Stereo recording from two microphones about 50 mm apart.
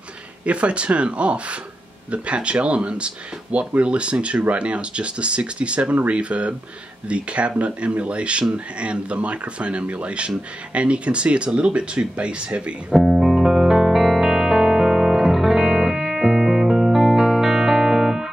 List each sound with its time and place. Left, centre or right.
0.5 s speech: right
12.9 s music: centre